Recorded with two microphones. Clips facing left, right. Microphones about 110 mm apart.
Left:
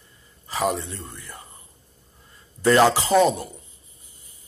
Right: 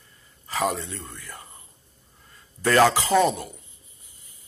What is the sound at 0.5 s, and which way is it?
Speech, 20° left (ahead or behind).